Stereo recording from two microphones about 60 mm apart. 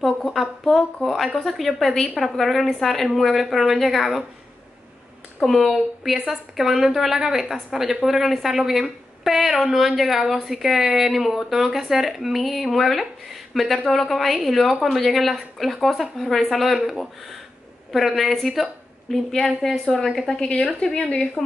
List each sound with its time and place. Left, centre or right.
0.0 s speech: centre
5.4 s a woman's voice: centre